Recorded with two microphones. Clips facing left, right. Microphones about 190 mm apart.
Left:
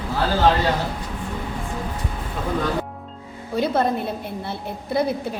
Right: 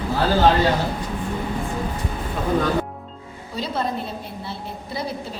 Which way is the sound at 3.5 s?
55° left (ahead or behind).